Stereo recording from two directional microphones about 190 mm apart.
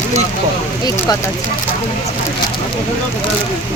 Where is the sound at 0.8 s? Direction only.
20° left (ahead or behind).